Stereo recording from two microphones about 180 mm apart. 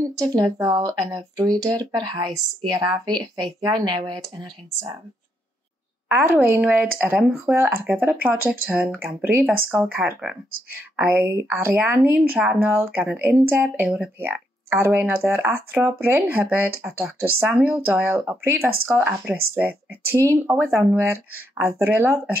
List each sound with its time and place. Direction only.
0.2 s speech: 20° right (ahead or behind)
6.0 s a woman's voice: 15° right (ahead or behind)